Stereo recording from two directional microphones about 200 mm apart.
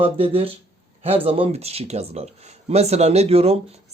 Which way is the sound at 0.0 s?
30° right (ahead or behind).